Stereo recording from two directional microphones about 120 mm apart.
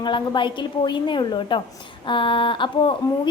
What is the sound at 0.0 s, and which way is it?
A woman's voice, 40° left (ahead or behind).